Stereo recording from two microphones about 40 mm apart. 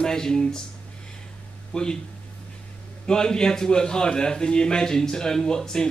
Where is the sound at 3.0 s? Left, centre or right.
Centre.